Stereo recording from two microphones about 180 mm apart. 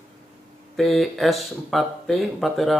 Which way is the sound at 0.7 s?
Centre (ahead or behind).